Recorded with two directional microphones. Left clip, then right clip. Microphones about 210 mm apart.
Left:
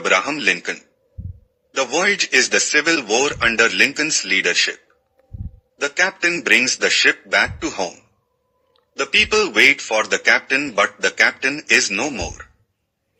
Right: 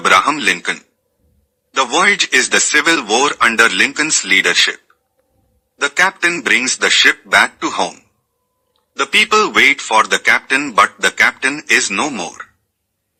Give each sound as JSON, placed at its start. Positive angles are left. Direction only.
{"t": 0.0, "sound": "a man's voice", "side_deg": -10}
{"t": 5.8, "sound": "a man's voice", "side_deg": -10}